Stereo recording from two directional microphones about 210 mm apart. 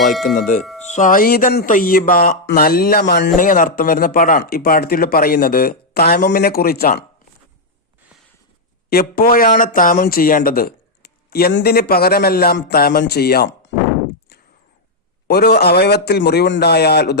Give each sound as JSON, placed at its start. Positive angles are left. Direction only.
{"t": 0.1, "sound": "speech", "side_deg": 0}
{"t": 0.3, "sound": "speech", "side_deg": 40}
{"t": 8.9, "sound": "speech", "side_deg": 45}
{"t": 15.3, "sound": "speech", "side_deg": 50}